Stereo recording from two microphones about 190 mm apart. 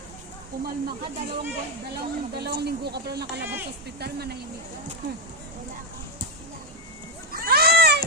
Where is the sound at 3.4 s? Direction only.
10° right (ahead or behind).